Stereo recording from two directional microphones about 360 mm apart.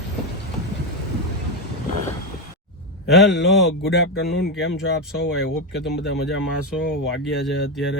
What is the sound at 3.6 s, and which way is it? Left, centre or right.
Speech, left.